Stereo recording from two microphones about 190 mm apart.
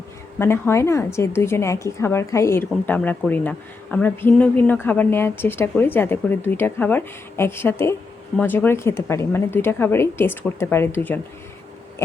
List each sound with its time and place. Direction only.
0.3 s a woman's voice: 15° left (ahead or behind)